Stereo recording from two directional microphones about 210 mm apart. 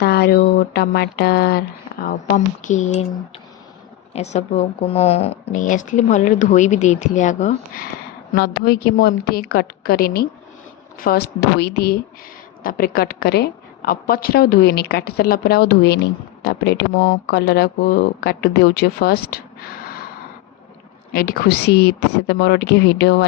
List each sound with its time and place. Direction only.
0.0 s speech: 50° left (ahead or behind); by 3.1 s 35° left (ahead or behind)
4.1 s speech: 30° left (ahead or behind)
8.3 s speech: 45° left (ahead or behind)
21.1 s speech: 45° left (ahead or behind)